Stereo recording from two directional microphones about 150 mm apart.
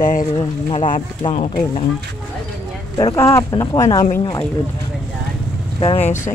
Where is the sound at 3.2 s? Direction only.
20° left (ahead or behind).